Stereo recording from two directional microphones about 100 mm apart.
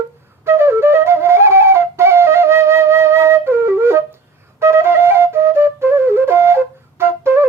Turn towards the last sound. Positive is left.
turn(degrees=-25)  # may be behind; listen again after turning